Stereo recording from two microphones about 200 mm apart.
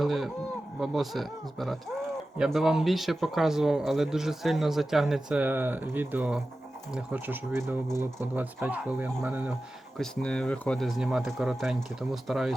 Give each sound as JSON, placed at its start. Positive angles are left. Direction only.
{"t": 0.0, "sound": "a sound", "side_deg": 0}
{"t": 0.8, "sound": "speech", "side_deg": 0}
{"t": 10.0, "sound": "speech", "side_deg": 5}